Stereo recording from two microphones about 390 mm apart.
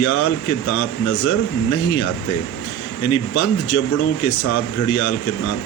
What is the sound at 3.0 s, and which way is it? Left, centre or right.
Speech, left.